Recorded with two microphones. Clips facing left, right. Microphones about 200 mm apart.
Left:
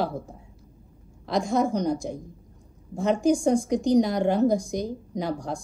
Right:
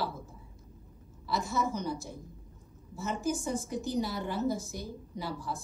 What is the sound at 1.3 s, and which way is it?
Speech, 70° left (ahead or behind).